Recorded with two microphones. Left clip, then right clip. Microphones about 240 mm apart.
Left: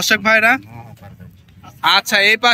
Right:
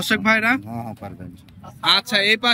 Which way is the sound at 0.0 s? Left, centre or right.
Centre.